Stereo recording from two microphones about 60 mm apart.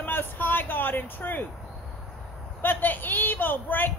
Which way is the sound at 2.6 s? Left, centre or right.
Left.